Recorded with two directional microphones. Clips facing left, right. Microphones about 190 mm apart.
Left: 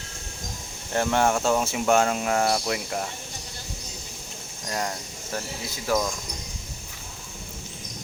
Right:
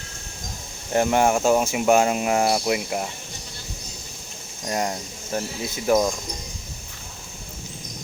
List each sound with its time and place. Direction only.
0.9 s speech: 15° right (ahead or behind)
4.6 s speech: 20° right (ahead or behind)